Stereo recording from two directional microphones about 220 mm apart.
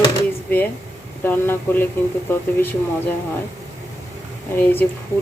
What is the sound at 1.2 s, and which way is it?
Speech, 10° left (ahead or behind).